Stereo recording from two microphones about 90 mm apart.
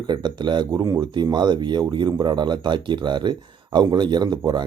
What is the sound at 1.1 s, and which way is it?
Speech, 55° right (ahead or behind).